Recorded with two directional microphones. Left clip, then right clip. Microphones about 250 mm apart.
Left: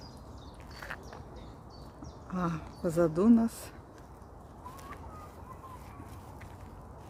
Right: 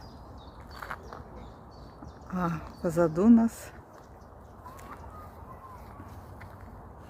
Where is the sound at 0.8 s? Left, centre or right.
Centre.